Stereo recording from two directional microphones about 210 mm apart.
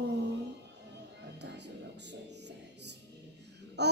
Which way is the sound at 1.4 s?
55° right (ahead or behind).